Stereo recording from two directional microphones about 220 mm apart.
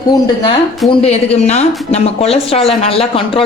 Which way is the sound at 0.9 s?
30° left (ahead or behind).